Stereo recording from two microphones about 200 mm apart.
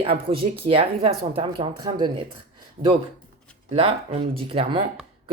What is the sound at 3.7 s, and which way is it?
Speech, 30° right (ahead or behind).